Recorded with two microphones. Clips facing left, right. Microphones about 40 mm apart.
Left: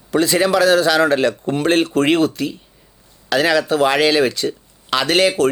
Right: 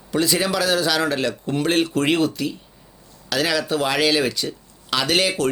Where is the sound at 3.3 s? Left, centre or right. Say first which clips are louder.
Left 5 dB; centre.